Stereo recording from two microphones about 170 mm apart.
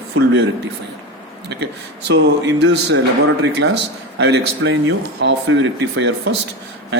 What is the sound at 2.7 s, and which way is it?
Speech, 90° right.